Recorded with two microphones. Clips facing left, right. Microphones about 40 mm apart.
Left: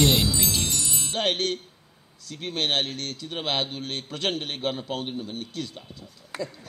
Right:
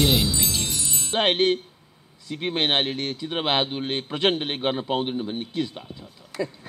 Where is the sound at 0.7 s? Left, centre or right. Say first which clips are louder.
Right 1 dB; right.